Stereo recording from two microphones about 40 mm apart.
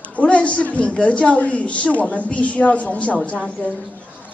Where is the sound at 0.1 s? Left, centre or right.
Left.